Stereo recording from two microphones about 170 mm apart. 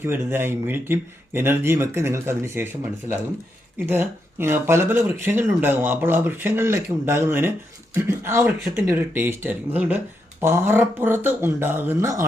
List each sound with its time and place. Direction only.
0.0 s speech: 15° right (ahead or behind)